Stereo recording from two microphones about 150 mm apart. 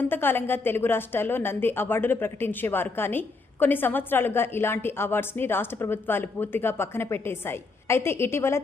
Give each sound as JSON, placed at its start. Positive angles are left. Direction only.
{"t": 0.0, "sound": "a woman's voice", "side_deg": 15}